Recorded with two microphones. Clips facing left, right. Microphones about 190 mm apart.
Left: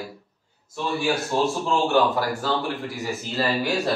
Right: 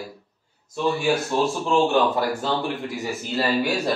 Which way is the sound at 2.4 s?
20° right (ahead or behind).